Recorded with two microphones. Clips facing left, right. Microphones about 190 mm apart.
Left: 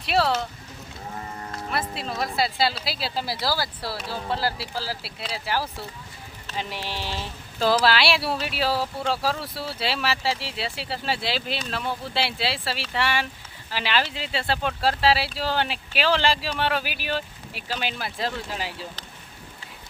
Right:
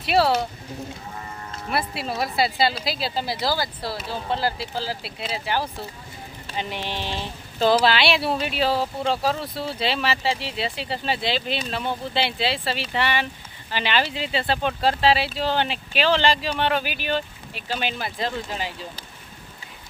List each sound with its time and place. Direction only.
0.0 s speech: 5° right (ahead or behind)
1.7 s speech: 5° right (ahead or behind)
3.4 s speech: 20° right (ahead or behind)
4.1 s speech: 5° left (ahead or behind)
6.5 s a sound: 10° right (ahead or behind)
6.8 s speech: 5° left (ahead or behind)
8.7 s speech: 20° right (ahead or behind)
9.7 s speech: 5° left (ahead or behind)